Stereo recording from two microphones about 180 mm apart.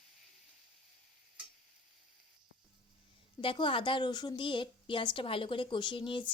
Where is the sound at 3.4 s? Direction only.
30° left (ahead or behind).